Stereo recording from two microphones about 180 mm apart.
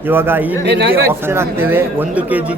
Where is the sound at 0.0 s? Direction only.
10° right (ahead or behind).